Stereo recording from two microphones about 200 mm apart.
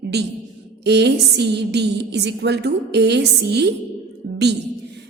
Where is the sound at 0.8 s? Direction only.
55° right (ahead or behind).